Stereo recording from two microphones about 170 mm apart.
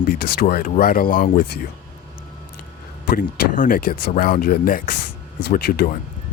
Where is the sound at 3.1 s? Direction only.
50° left (ahead or behind).